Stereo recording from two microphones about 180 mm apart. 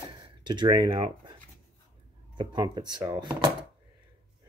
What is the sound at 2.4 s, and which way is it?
Speech, 25° right (ahead or behind).